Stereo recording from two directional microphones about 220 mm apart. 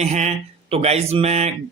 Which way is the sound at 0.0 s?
30° right (ahead or behind).